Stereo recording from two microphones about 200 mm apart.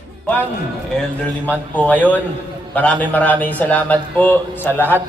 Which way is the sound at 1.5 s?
5° left (ahead or behind).